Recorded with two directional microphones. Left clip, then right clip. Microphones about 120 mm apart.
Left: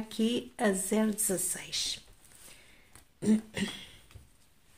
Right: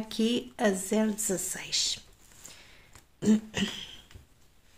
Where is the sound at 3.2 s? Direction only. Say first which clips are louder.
Right 3 dB; 40° right (ahead or behind).